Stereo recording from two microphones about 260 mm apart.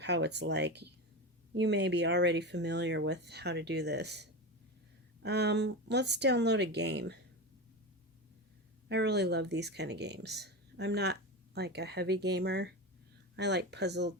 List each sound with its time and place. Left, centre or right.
0.0 s speech: right
8.9 s speech: right